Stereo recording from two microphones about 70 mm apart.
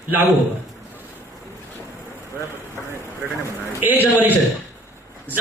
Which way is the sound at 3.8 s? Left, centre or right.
Right.